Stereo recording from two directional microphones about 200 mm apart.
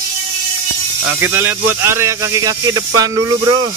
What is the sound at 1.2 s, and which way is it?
Speech, 10° right (ahead or behind).